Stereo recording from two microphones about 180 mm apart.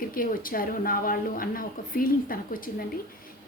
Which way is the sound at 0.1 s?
50° left (ahead or behind).